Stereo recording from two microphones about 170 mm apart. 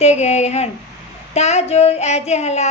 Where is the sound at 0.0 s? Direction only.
40° left (ahead or behind).